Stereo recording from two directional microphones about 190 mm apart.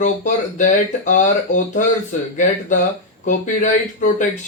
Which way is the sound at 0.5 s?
40° left (ahead or behind).